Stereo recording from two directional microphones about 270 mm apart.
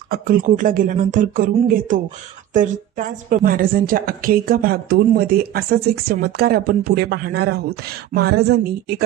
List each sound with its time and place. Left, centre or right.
0.1 s a woman's voice: right